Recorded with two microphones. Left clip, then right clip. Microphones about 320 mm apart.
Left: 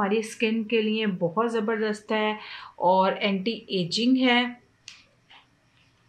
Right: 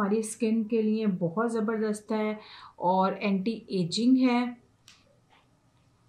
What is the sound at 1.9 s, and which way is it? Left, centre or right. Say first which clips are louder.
Speech: left 5 dB; centre.